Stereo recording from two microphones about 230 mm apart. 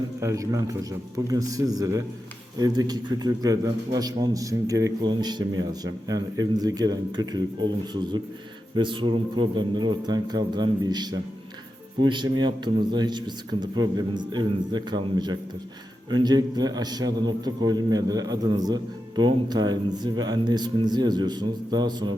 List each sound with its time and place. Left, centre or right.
0.2 s a man's voice: centre